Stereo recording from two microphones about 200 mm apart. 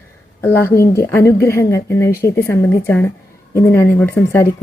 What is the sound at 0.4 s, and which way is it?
Speech, 10° left (ahead or behind).